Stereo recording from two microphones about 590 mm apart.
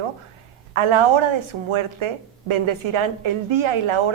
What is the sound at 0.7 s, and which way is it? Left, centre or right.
A woman's voice, right.